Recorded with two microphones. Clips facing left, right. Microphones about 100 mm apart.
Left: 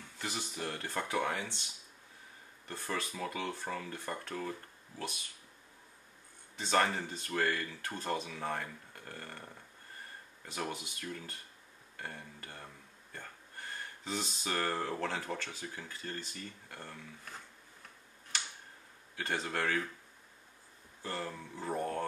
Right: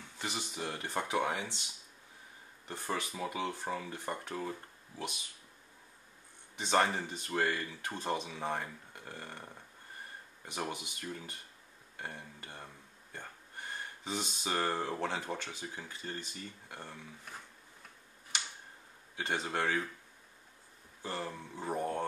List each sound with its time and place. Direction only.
0.2 s speech: 20° right (ahead or behind)
2.7 s speech: 15° right (ahead or behind)
6.5 s speech: 20° right (ahead or behind)
19.1 s speech: 20° right (ahead or behind)
21.0 s speech: 20° right (ahead or behind)